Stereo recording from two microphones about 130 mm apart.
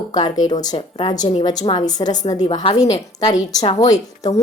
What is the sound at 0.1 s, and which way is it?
A woman's voice, 30° left (ahead or behind).